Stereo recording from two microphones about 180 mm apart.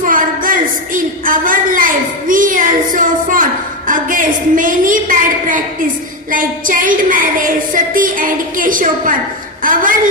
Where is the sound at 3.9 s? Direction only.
50° right (ahead or behind).